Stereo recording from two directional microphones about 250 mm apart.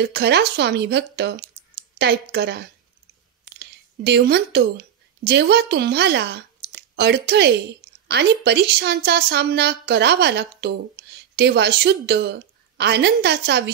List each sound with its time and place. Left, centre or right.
0.0 s a woman's voice: right
3.5 s a sound: right
5.2 s a woman's voice: right